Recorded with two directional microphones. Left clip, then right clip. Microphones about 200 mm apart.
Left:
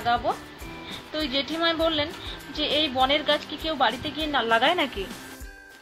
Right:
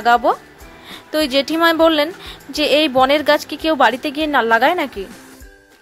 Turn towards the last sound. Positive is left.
turn(degrees=-30)  # may be behind; listen again after turning